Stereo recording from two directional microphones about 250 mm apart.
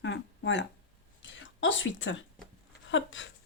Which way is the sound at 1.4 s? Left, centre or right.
Left.